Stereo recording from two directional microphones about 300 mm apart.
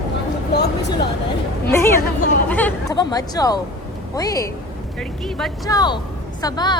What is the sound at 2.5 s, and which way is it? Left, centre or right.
A woman's voice, centre.